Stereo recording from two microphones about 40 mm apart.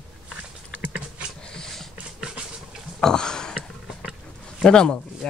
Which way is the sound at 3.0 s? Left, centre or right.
Centre.